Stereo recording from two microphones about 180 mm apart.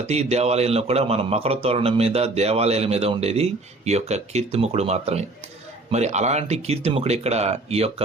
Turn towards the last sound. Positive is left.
turn(degrees=-35)  # may be behind; listen again after turning